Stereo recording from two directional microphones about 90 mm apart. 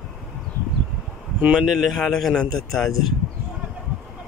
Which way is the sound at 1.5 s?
5° right (ahead or behind).